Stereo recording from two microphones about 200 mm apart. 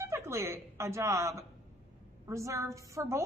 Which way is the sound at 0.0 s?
15° right (ahead or behind).